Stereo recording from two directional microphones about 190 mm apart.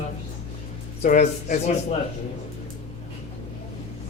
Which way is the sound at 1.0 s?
40° left (ahead or behind).